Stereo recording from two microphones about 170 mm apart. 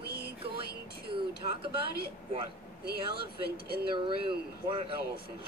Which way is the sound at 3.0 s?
65° left (ahead or behind).